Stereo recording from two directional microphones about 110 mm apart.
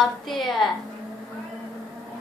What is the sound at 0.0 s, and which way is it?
Speech, centre (ahead or behind).